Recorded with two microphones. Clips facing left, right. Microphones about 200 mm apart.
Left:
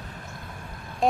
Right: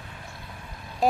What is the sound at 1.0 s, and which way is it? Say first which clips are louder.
Vehicle: even; 5° right (ahead or behind).